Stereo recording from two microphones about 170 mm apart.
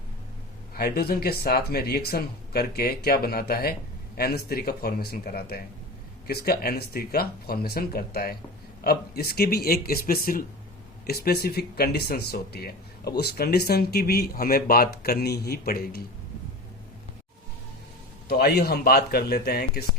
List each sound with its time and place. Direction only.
0.7 s speech: 65° left (ahead or behind)
18.3 s speech: 70° left (ahead or behind)